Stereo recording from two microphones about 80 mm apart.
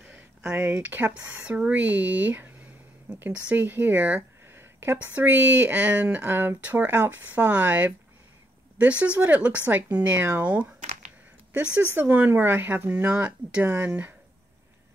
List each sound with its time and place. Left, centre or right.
0.5 s speech: centre
4.5 s a sound: right
4.9 s speech: right